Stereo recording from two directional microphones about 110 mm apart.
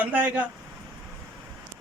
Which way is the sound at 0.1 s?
15° right (ahead or behind).